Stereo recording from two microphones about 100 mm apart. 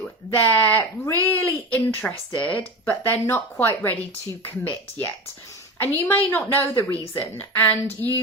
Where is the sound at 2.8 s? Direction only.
20° left (ahead or behind).